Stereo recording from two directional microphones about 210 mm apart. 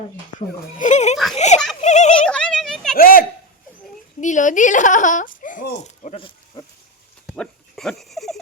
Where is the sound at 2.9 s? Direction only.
45° left (ahead or behind); by 6.7 s 25° left (ahead or behind).